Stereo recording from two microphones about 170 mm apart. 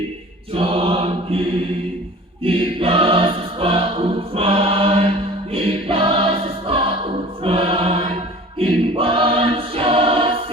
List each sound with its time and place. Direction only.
0.5 s mantra: 35° right (ahead or behind)
2.4 s choir: 35° right (ahead or behind)
5.5 s music: 35° right (ahead or behind)
8.5 s choir: 30° right (ahead or behind)